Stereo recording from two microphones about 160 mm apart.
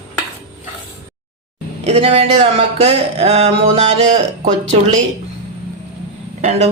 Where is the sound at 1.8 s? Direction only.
35° right (ahead or behind).